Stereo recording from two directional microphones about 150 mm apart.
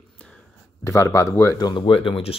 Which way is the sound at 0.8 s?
20° left (ahead or behind).